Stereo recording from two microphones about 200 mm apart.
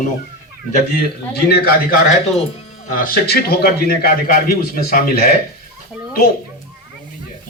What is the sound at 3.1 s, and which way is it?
A man's voice, 50° left (ahead or behind).